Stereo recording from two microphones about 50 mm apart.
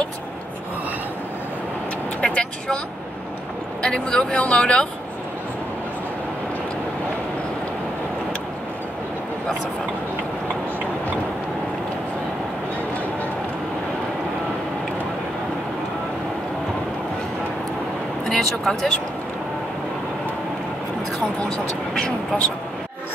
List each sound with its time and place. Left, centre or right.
2.2 s speech: left
3.8 s speech: centre
18.2 s speech: centre
21.4 s speech: centre